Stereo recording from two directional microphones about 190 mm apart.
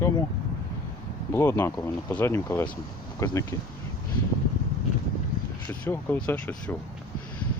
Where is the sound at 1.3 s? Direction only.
15° left (ahead or behind).